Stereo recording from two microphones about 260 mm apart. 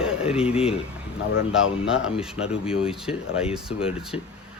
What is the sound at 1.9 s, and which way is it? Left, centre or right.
Speech, centre.